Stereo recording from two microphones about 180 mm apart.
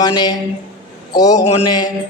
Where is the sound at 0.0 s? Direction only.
25° left (ahead or behind).